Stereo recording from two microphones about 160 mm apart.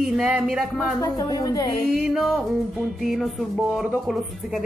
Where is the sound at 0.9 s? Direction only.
20° left (ahead or behind).